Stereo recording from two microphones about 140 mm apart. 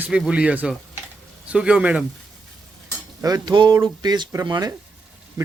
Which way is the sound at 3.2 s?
30° right (ahead or behind).